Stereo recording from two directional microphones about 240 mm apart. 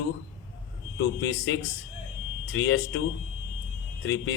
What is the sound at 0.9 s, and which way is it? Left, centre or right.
A man's voice, left.